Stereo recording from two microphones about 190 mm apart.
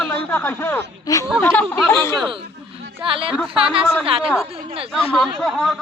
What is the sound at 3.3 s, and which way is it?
A man's voice, centre (ahead or behind).